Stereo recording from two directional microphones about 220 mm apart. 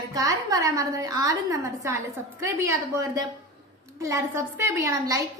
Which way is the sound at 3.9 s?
15° right (ahead or behind).